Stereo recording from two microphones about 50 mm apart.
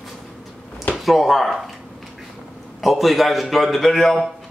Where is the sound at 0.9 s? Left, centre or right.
Centre.